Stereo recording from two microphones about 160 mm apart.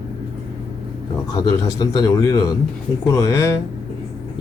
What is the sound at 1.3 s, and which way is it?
Speech, 25° left (ahead or behind).